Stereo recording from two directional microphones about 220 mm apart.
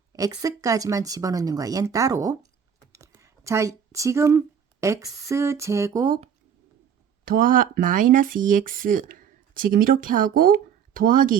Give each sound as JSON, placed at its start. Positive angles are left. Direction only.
{"t": 0.1, "sound": "speech", "side_deg": -15}
{"t": 7.3, "sound": "speech", "side_deg": -40}